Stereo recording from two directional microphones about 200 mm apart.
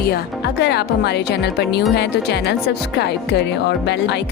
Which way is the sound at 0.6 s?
55° left (ahead or behind).